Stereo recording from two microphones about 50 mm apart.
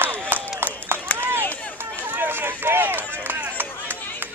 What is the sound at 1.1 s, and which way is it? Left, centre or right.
Run, right.